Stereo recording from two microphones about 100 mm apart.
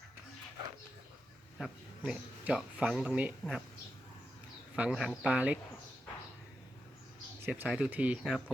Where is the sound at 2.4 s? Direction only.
10° right (ahead or behind).